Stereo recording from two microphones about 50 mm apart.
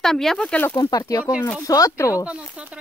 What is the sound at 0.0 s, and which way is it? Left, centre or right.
Speech, centre.